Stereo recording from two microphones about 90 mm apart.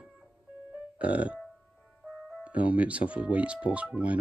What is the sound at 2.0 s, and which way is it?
Music, 5° left (ahead or behind).